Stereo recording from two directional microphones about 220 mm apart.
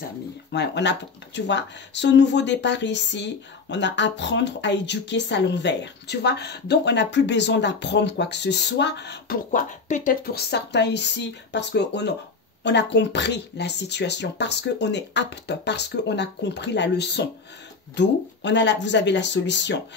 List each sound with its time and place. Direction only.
0.5 s speech: 50° left (ahead or behind)
9.5 s speech: 35° left (ahead or behind); by 19.8 s 55° left (ahead or behind)